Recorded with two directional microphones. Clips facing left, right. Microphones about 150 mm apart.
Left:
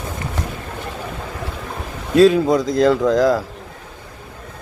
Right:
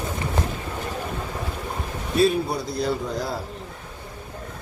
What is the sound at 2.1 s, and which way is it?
A man's voice, 90° left.